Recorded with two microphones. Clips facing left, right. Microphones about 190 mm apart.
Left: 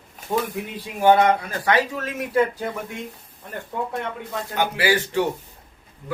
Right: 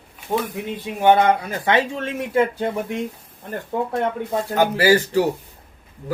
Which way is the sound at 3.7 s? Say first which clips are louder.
Right 6 dB; 35° right (ahead or behind).